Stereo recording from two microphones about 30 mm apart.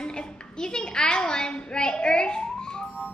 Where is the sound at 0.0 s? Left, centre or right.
Left.